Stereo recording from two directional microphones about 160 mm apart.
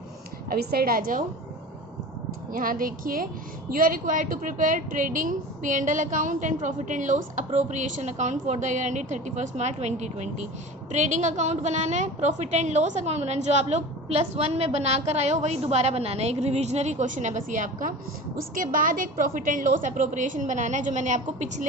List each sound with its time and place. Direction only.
0.5 s a woman's voice: 75° right (ahead or behind)
2.5 s a woman's voice: 60° right (ahead or behind)